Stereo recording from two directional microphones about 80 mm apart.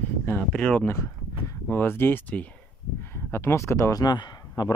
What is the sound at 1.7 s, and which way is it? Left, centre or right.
Speech, left.